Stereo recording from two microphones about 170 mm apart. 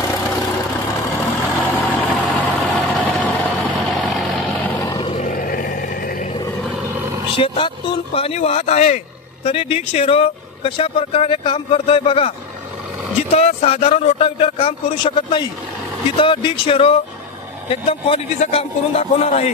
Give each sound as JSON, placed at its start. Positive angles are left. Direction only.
{"t": 1.2, "sound": "vehicle", "side_deg": 10}
{"t": 4.8, "sound": "vehicle", "side_deg": 25}
{"t": 5.1, "sound": "a sound", "side_deg": 50}
{"t": 7.2, "sound": "speech", "side_deg": 30}